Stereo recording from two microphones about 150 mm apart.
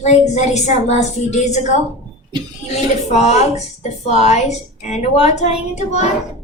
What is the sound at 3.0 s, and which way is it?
A woman's voice, 50° left (ahead or behind).